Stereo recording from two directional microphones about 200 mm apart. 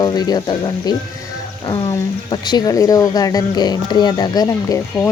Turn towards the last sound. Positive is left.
turn(degrees=20)  # may be behind; listen again after turning